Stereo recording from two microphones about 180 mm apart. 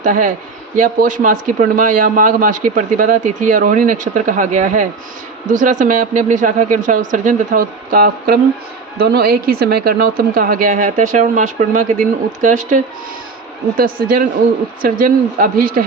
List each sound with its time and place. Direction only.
0.0 s a man's voice: 45° right (ahead or behind)